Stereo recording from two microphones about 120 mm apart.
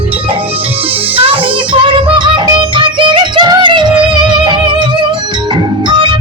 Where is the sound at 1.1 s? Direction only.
50° right (ahead or behind).